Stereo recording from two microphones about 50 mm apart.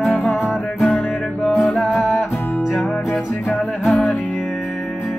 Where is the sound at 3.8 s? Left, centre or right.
Centre.